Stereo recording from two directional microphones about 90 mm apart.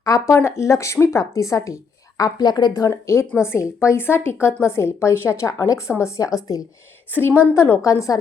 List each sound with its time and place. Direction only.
0.0 s a woman's voice: 35° left (ahead or behind)